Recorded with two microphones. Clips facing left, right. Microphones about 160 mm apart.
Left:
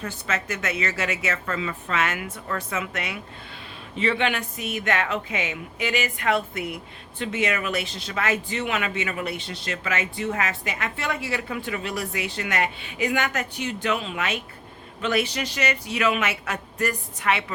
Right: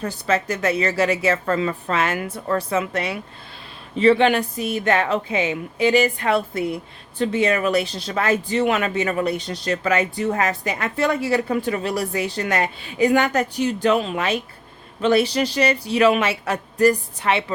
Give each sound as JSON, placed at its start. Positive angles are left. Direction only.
{"t": 0.0, "sound": "speech", "side_deg": -35}